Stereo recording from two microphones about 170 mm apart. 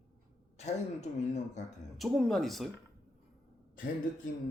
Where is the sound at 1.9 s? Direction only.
Centre (ahead or behind).